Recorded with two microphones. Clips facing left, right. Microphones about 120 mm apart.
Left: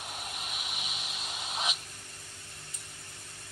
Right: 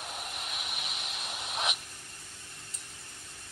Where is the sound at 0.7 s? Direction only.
60° right (ahead or behind).